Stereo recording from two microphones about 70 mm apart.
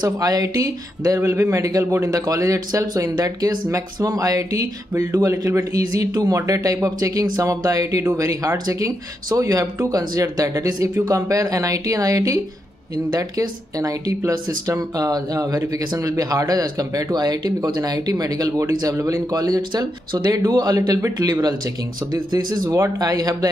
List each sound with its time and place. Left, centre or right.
0.0 s speech: right
1.2 s speech: right
1.7 s speech: right
8.0 s speech: right
8.3 s speech: right
22.9 s speech: right